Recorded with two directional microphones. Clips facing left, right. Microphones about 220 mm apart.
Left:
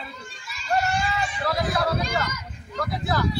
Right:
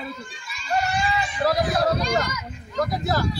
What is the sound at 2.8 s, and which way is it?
Speech, 40° right (ahead or behind).